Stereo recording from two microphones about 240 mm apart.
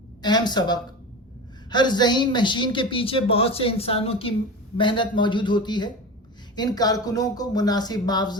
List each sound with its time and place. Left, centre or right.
0.2 s a man's voice: centre